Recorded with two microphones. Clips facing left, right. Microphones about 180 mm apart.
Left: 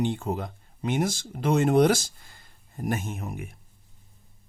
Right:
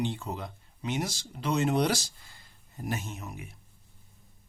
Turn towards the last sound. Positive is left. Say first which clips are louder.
# left 6 dB
turn(degrees=50)  # may be behind; listen again after turning